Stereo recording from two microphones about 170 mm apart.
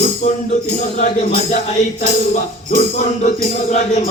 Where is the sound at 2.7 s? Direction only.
45° left (ahead or behind).